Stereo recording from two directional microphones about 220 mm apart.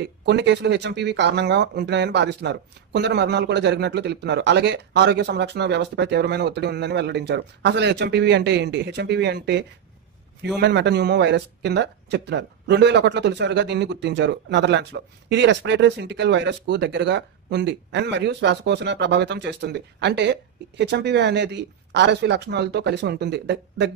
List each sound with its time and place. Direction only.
0.0 s speech: 50° right (ahead or behind)